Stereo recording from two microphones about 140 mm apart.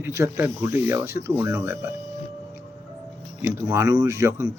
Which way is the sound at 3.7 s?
20° right (ahead or behind).